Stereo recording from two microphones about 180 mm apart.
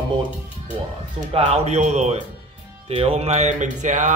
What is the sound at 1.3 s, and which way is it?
Speech, 35° right (ahead or behind).